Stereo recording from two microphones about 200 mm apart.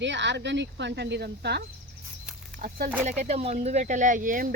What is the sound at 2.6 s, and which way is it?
Speech, 45° right (ahead or behind).